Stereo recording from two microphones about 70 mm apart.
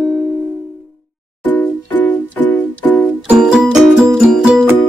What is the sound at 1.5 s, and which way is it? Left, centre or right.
Music, left.